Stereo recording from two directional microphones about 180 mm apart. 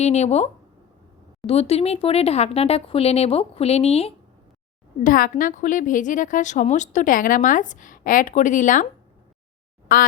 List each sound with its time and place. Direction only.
0.0 s speech: 35° left (ahead or behind)
5.0 s a woman's voice: 50° left (ahead or behind)
9.9 s a woman's voice: 55° left (ahead or behind)